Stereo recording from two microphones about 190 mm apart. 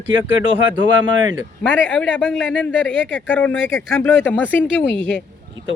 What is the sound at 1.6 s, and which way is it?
Speech, 5° left (ahead or behind).